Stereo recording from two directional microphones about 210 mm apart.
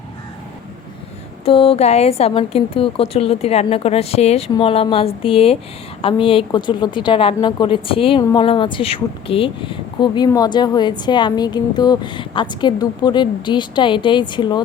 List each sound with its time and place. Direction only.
1.5 s a woman's voice: 25° left (ahead or behind)